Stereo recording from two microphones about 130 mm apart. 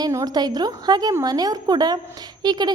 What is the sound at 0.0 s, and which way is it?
A woman's voice, 25° right (ahead or behind).